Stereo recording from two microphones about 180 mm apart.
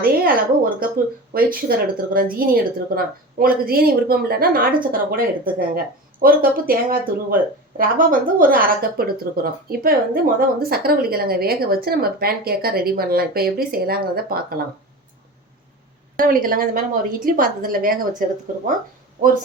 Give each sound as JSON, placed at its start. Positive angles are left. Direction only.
{"t": 0.0, "sound": "a woman's voice", "side_deg": -55}
{"t": 16.1, "sound": "speech", "side_deg": -50}